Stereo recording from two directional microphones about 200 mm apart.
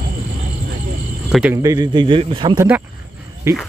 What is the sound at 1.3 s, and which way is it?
Speech, 10° right (ahead or behind).